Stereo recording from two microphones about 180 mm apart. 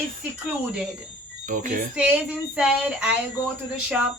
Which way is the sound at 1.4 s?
45° right (ahead or behind).